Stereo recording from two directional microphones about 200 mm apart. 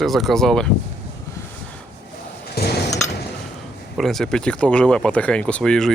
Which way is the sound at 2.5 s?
55° left (ahead or behind).